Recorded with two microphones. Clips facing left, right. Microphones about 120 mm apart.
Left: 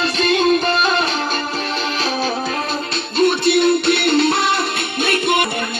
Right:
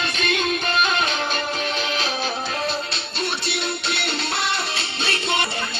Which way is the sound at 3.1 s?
55° left (ahead or behind).